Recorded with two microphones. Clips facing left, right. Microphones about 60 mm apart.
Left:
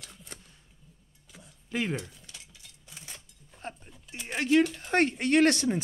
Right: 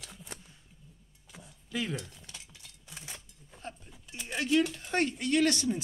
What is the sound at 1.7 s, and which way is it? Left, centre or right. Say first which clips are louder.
Speech: left 4 dB; left.